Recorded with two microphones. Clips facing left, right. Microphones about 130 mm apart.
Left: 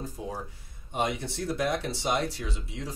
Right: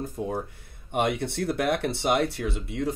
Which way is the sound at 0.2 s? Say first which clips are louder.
Right 6 dB; 55° right (ahead or behind).